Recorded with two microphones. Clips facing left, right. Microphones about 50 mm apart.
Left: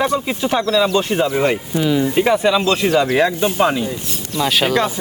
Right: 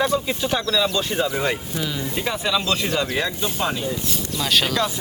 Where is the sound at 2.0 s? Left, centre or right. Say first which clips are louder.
Left 11 dB; left.